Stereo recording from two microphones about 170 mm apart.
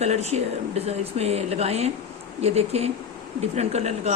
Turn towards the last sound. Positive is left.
turn(degrees=-40)  # may be behind; listen again after turning